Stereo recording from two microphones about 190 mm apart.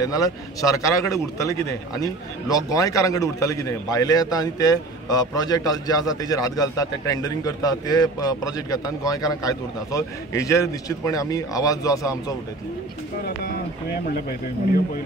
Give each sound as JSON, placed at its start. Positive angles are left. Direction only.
{"t": 0.0, "sound": "speech", "side_deg": 20}
{"t": 13.2, "sound": "speech", "side_deg": 60}